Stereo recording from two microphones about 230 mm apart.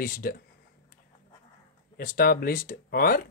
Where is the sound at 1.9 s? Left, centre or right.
Left.